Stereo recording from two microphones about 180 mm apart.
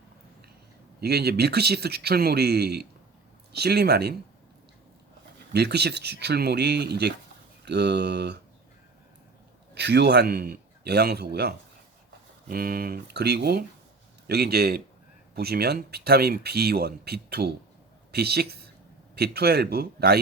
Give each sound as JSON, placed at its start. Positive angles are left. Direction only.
{"t": 1.0, "sound": "speech", "side_deg": -60}
{"t": 5.5, "sound": "speech", "side_deg": -65}
{"t": 9.7, "sound": "a man's voice", "side_deg": -65}